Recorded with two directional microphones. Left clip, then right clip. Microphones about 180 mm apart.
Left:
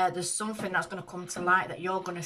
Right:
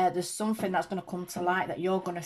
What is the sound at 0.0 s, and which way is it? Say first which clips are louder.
Speech: right 1 dB; 30° right (ahead or behind).